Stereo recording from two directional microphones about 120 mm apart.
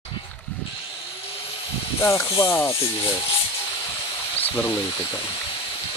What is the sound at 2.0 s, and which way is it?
Speech, 25° left (ahead or behind).